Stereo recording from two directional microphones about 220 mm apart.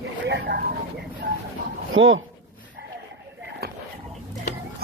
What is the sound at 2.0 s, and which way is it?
Speech, 65° right (ahead or behind).